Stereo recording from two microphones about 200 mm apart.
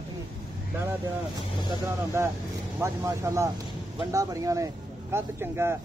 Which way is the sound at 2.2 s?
15° right (ahead or behind).